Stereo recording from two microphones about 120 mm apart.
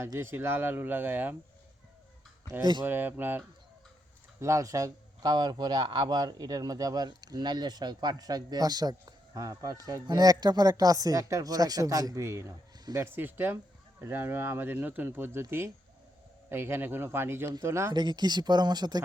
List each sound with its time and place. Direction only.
0.2 s speech: 20° right (ahead or behind)
2.8 s speech: 15° right (ahead or behind)
13.1 s speech: 15° right (ahead or behind)
17.9 s speech: 35° right (ahead or behind)